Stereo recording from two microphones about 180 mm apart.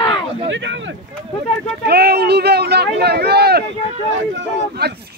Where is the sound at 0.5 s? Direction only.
90° right.